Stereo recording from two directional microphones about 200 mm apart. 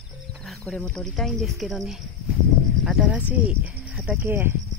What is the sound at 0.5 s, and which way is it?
Speech, 5° left (ahead or behind).